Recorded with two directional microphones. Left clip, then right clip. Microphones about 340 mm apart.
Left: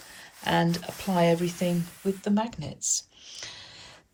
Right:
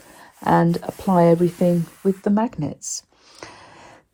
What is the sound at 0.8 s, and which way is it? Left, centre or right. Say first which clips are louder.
Speech: right 8 dB; right.